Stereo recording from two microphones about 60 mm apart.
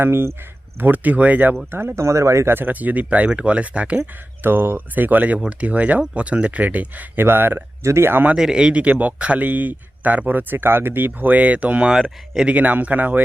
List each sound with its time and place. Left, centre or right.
0.0 s speech: right
0.8 s speech: right
1.7 s speech: right
2.6 s speech: right
4.4 s speech: right
8.4 s speech: centre; by 13.2 s right